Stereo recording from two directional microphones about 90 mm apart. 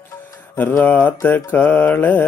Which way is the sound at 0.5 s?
25° left (ahead or behind).